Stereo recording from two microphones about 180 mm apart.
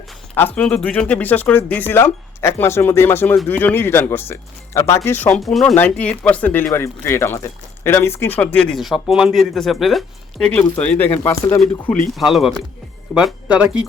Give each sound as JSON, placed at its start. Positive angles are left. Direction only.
{"t": 0.5, "sound": "speech", "side_deg": 5}
{"t": 11.1, "sound": "speech", "side_deg": 20}
{"t": 12.1, "sound": "speech", "side_deg": 0}